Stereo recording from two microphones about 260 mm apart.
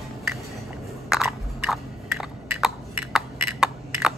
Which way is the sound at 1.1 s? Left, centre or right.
Centre.